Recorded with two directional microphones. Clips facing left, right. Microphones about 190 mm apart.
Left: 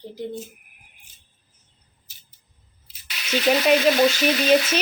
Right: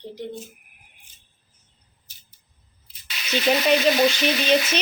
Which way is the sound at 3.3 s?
5° left (ahead or behind).